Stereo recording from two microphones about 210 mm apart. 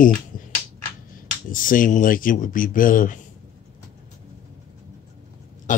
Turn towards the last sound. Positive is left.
turn(degrees=35)  # may be behind; listen again after turning